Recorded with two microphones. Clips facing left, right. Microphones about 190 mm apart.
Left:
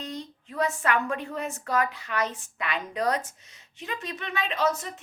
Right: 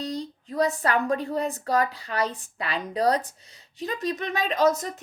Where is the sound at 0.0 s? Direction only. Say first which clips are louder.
Right 5 dB; 35° right (ahead or behind).